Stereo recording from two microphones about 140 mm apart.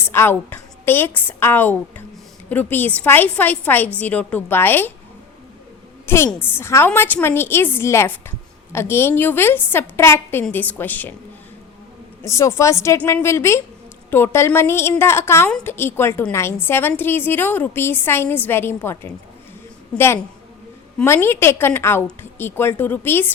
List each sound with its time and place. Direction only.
0.1 s a woman's voice: 15° left (ahead or behind)
6.1 s a woman's voice: 15° left (ahead or behind)
12.2 s a woman's voice: 20° left (ahead or behind)
21.0 s a woman's voice: 15° left (ahead or behind)